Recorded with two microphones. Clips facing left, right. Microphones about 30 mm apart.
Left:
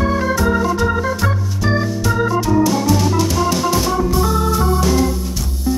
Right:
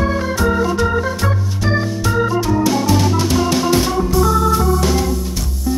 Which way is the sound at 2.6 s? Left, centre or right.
Centre.